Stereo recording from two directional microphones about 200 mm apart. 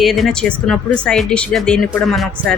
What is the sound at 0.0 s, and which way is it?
Speech, centre (ahead or behind).